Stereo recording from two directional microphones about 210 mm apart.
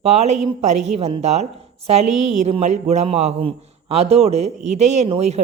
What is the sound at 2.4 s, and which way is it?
A woman's voice, 30° right (ahead or behind).